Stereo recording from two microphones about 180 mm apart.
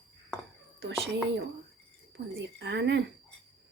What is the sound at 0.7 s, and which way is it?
Speech, 80° right.